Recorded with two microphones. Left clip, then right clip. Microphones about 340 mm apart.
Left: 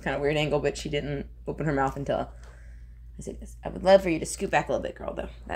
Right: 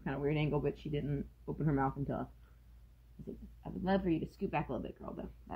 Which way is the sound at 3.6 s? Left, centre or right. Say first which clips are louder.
Left 15 dB; left.